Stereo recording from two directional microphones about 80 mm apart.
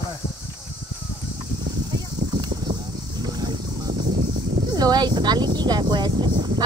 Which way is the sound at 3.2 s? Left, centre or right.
Right.